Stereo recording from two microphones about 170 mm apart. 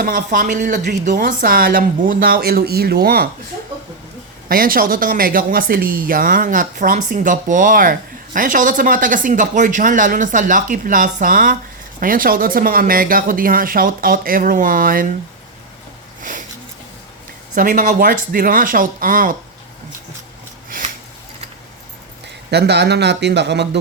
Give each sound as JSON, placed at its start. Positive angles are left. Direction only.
{"t": 0.0, "sound": "a woman's voice", "side_deg": -50}
{"t": 4.4, "sound": "a woman's voice", "side_deg": -55}
{"t": 16.2, "sound": "a sound", "side_deg": -50}
{"t": 17.5, "sound": "speech", "side_deg": -50}
{"t": 22.4, "sound": "speech", "side_deg": -75}